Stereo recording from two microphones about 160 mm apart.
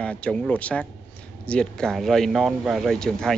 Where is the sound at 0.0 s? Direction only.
5° left (ahead or behind).